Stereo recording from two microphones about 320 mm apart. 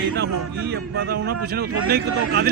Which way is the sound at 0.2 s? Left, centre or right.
Right.